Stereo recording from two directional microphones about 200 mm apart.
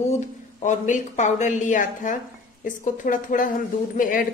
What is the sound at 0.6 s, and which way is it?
A woman's voice, 40° left (ahead or behind).